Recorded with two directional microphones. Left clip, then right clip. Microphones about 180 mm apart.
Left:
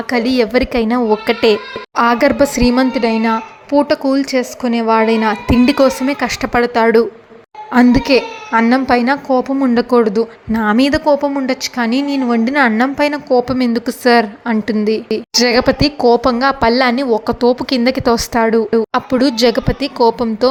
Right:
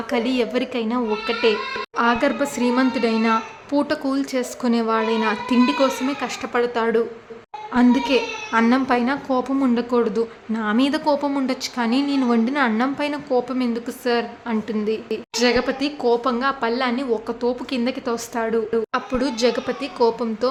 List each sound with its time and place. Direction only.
0.1 s a woman's voice: 30° left (ahead or behind)
4.9 s a woman's voice: 35° left (ahead or behind)